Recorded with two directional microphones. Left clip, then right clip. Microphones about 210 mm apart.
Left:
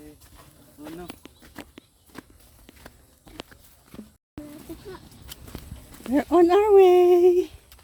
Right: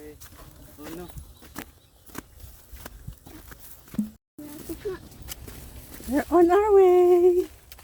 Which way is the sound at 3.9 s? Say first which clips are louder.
Right 12 dB; 50° right (ahead or behind).